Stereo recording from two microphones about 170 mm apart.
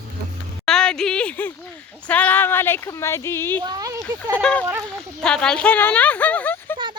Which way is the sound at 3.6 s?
25° right (ahead or behind).